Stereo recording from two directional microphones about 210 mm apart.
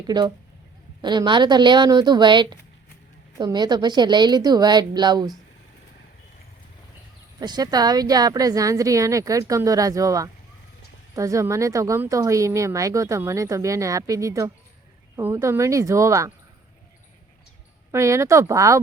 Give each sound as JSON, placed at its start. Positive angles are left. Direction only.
{"t": 0.1, "sound": "speech", "side_deg": -20}
{"t": 7.3, "sound": "speech", "side_deg": -20}
{"t": 17.9, "sound": "speech", "side_deg": -15}